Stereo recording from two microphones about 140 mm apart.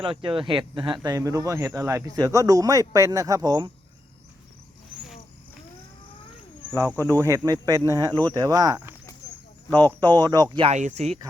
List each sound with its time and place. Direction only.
0.0 s speech: 40° right (ahead or behind)
1.0 s speech: 25° right (ahead or behind)
6.7 s speech: 20° right (ahead or behind)
10.7 s speech: 55° right (ahead or behind)